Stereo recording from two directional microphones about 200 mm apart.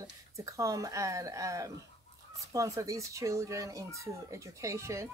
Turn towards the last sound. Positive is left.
turn(degrees=-15)  # may be behind; listen again after turning